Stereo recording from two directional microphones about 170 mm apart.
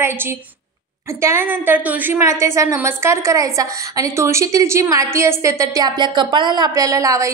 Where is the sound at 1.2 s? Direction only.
15° right (ahead or behind).